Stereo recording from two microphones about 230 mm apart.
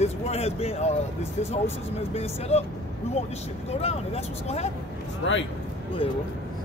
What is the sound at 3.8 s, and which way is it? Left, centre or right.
Speech, left.